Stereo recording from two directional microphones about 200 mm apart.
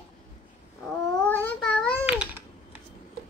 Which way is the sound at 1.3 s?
10° left (ahead or behind).